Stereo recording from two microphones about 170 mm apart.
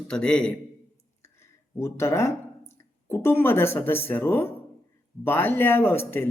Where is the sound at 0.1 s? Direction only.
5° left (ahead or behind).